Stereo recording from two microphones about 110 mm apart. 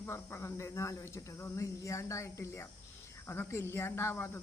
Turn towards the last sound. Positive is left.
turn(degrees=20)  # may be behind; listen again after turning